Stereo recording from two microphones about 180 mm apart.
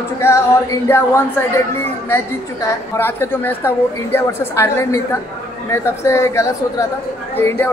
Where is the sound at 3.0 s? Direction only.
15° left (ahead or behind).